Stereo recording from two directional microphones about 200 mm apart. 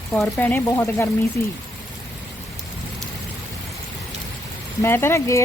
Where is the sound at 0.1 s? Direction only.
10° left (ahead or behind).